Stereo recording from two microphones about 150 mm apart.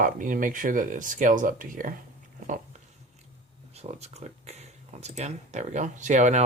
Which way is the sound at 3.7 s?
45° right (ahead or behind).